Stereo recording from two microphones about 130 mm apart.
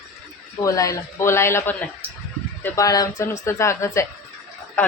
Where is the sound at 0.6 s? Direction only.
25° left (ahead or behind).